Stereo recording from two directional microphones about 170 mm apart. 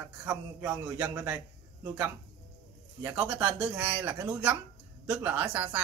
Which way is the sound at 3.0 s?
10° right (ahead or behind).